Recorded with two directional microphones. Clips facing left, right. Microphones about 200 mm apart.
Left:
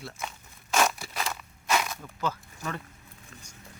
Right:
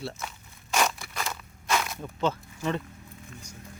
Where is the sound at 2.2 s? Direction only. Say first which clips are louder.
Right 5 dB; 25° right (ahead or behind).